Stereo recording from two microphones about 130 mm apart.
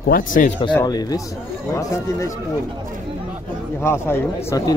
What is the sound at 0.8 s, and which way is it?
Speech, 30° left (ahead or behind).